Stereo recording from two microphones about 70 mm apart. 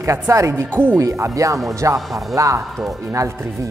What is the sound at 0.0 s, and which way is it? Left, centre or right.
Speech, right.